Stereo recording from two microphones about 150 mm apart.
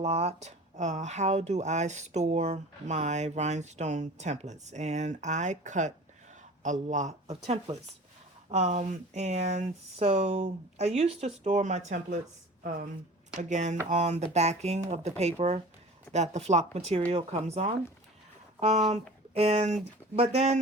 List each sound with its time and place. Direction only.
0.0 s speech: 45° right (ahead or behind)
12.6 s speech: 65° right (ahead or behind)
13.5 s speech: 50° right (ahead or behind)
18.9 s speech: 45° right (ahead or behind)